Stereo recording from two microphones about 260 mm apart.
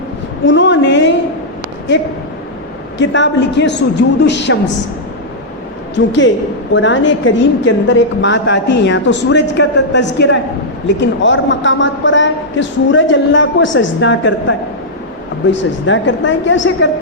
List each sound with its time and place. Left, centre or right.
0.4 s a woman's voice: left
3.0 s a woman's voice: left
6.1 s a woman's voice: left